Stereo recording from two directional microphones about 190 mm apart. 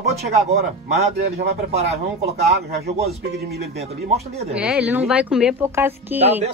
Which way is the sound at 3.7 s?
35° right (ahead or behind).